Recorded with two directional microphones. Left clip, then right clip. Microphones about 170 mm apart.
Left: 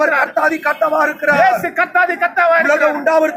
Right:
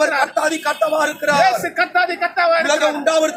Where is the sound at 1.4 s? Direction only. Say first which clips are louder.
Left 1 dB; centre (ahead or behind).